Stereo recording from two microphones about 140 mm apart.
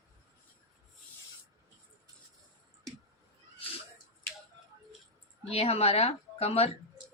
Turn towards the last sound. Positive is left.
turn(degrees=45)  # may be behind; listen again after turning